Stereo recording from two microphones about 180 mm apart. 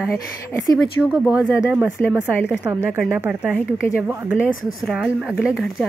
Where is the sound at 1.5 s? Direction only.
5° right (ahead or behind).